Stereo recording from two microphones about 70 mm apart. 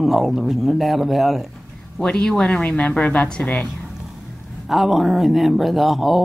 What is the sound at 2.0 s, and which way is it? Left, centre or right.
A man's voice, centre.